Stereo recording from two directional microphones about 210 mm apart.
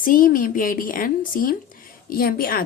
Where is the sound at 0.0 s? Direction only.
40° left (ahead or behind).